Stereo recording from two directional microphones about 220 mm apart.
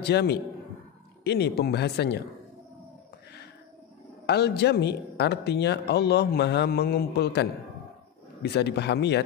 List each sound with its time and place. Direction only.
0.0 s speech: 50° left (ahead or behind)
4.3 s speech: 50° left (ahead or behind)